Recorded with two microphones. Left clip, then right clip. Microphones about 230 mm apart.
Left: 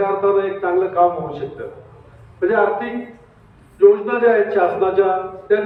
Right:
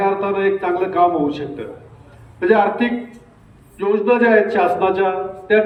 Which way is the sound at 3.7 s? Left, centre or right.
Right.